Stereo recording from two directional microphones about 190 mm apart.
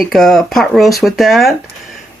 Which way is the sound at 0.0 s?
Centre (ahead or behind).